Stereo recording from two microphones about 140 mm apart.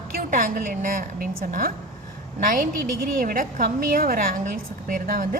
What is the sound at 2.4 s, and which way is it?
A woman's voice, 70° right (ahead or behind).